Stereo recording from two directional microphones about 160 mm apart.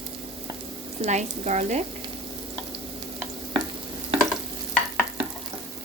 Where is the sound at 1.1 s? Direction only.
45° right (ahead or behind).